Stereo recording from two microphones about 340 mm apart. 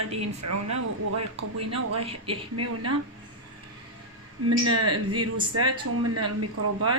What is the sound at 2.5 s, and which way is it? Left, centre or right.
Speech, right.